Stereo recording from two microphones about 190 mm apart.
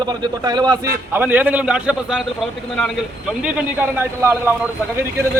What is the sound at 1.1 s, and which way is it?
A man's voice, 10° right (ahead or behind).